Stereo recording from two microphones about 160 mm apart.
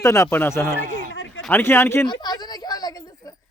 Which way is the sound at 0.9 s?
55° right (ahead or behind).